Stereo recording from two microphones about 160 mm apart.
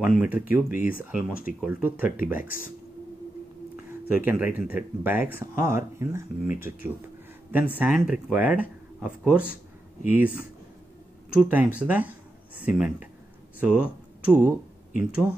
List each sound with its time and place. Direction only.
0.0 s speech: 10° right (ahead or behind)
0.7 s speech: 60° left (ahead or behind)
1.1 s speech: 10° right (ahead or behind)
2.4 s speech: 60° left (ahead or behind)
4.1 s speech: 10° right (ahead or behind)